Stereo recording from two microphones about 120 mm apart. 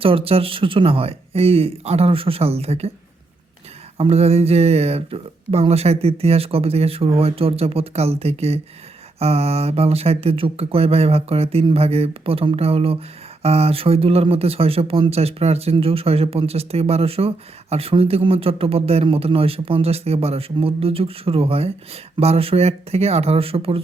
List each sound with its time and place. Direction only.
0.0 s speech: 50° right (ahead or behind)
3.9 s speech: 60° right (ahead or behind)